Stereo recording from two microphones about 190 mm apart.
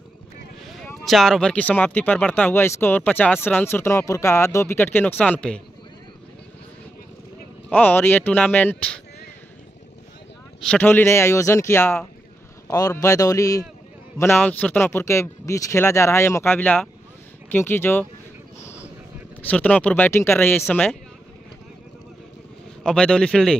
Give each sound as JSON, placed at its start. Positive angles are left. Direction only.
{"t": 0.8, "sound": "speech", "side_deg": 0}
{"t": 7.7, "sound": "speech", "side_deg": 10}
{"t": 10.6, "sound": "speech", "side_deg": 5}
{"t": 19.4, "sound": "speech", "side_deg": 5}
{"t": 22.8, "sound": "speech", "side_deg": 5}